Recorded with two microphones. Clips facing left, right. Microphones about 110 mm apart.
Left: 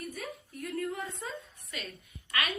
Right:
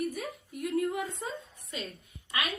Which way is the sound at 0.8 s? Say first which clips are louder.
Right 4 dB; 30° right (ahead or behind).